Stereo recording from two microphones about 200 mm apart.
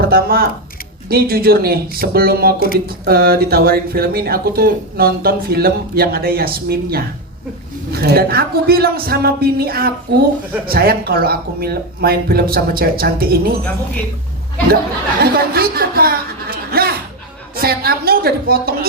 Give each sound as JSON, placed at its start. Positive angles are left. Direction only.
{"t": 0.0, "sound": "speech", "side_deg": -50}
{"t": 15.2, "sound": "speech", "side_deg": -50}